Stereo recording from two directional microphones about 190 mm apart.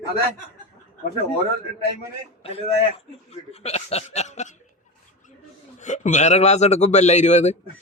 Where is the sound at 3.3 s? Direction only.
35° left (ahead or behind).